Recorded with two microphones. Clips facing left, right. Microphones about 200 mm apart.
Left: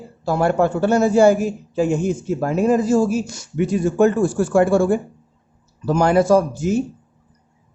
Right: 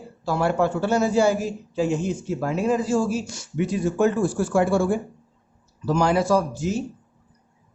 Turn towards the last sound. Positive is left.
turn(degrees=50)  # may be behind; listen again after turning